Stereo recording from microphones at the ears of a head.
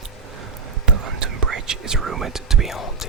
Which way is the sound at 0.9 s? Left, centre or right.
Right.